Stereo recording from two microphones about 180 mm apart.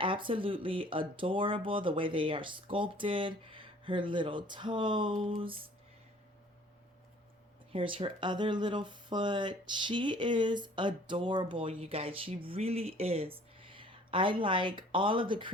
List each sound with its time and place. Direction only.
0.0 s speech: 30° right (ahead or behind)
5.4 s a sound: 30° right (ahead or behind)
7.7 s speech: 30° right (ahead or behind)